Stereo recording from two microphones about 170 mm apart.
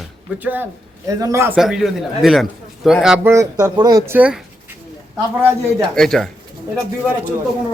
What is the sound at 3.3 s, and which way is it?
Speech, 20° right (ahead or behind).